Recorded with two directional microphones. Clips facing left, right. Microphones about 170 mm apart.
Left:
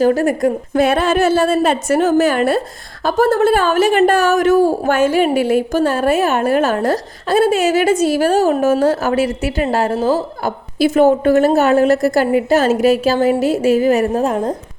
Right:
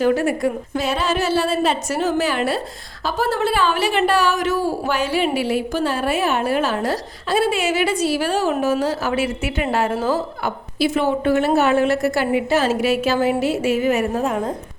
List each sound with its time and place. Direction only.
0.0 s a woman's voice: 40° left (ahead or behind)